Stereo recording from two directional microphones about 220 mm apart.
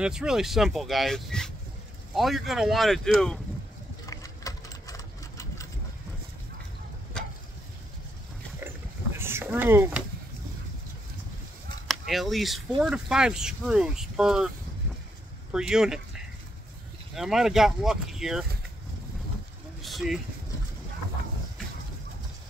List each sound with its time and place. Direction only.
0.0 s speech: 5° right (ahead or behind)
4.0 s sewing machine: 15° left (ahead or behind)
9.2 s a sound: 10° right (ahead or behind)
12.1 s speech: centre (ahead or behind)
15.5 s speech: 5° right (ahead or behind)
17.1 s speech: centre (ahead or behind)
19.8 s vehicle: centre (ahead or behind)